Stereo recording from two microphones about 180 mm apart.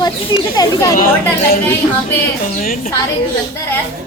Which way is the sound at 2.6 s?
50° left (ahead or behind).